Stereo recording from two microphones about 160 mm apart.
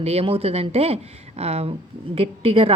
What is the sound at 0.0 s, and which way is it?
A woman's voice, 40° right (ahead or behind).